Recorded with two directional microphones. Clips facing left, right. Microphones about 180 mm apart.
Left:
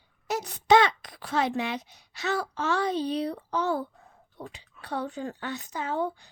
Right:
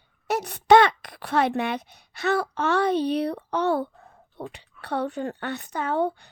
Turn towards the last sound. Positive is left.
turn(degrees=-65)  # may be behind; listen again after turning